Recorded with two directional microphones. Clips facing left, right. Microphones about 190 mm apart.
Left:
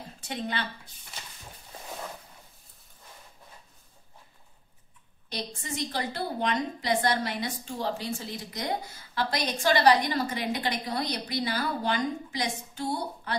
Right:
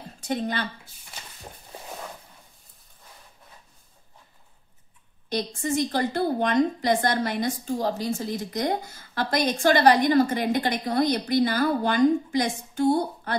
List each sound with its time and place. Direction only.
0.3 s a woman's voice: 45° right (ahead or behind)
5.3 s a woman's voice: 50° right (ahead or behind)